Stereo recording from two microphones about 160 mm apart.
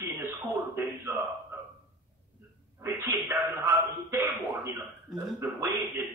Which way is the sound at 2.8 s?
15° right (ahead or behind).